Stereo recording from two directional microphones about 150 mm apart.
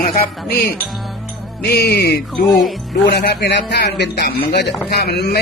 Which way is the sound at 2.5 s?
Centre (ahead or behind).